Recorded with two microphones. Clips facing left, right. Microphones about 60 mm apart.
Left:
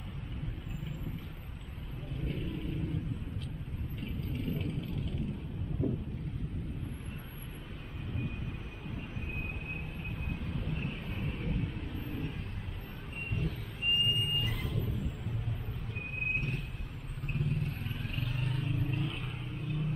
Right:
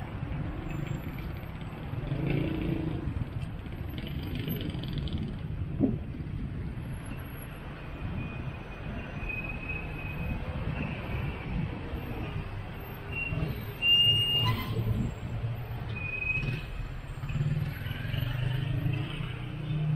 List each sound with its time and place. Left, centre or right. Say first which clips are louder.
0.7 s vehicle: right 6 dB; right
2.0 s vehicle: right 7 dB; right
11.9 s vehicle: right 1 dB; right
16.3 s vehicle: right 1 dB; right